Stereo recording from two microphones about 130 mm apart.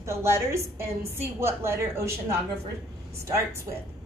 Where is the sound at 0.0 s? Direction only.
20° right (ahead or behind).